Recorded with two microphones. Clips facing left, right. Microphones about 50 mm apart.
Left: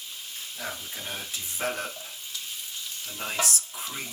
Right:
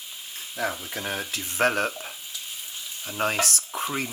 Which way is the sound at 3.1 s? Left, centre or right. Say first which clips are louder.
Right 6 dB; right.